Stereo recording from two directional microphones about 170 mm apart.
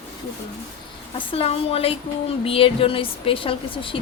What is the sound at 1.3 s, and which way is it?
A woman's voice, 35° left (ahead or behind).